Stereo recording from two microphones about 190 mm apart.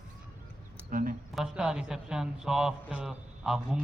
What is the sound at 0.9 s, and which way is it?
Speech, 45° right (ahead or behind).